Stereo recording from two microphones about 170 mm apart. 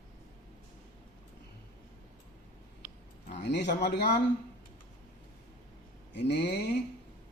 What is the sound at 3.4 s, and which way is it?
Speech, 90° left.